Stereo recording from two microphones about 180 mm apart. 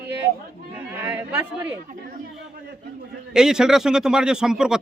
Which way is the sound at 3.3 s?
5° right (ahead or behind).